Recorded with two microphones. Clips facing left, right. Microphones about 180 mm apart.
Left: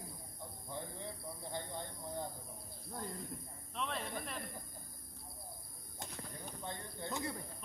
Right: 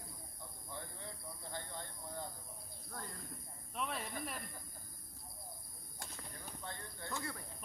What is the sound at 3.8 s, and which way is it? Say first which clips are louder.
Speech: left 1 dB; 10° right (ahead or behind).